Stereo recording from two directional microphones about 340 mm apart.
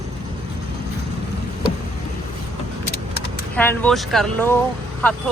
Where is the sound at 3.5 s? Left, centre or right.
Centre.